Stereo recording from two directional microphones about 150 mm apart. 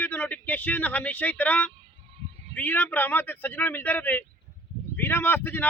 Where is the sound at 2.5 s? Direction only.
10° left (ahead or behind).